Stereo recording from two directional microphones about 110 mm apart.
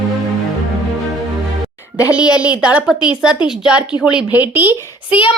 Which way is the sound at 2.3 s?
10° right (ahead or behind).